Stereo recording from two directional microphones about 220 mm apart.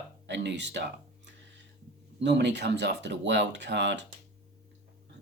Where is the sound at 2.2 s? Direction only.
50° right (ahead or behind).